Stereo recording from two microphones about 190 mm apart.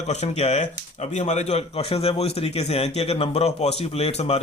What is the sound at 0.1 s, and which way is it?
A man's voice, 35° left (ahead or behind).